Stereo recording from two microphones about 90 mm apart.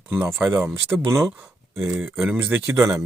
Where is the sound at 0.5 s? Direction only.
30° right (ahead or behind).